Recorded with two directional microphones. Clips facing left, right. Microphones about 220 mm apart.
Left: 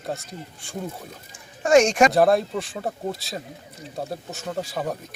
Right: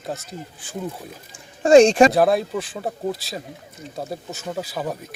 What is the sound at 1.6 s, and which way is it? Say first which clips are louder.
Speech: right 5 dB; 30° right (ahead or behind).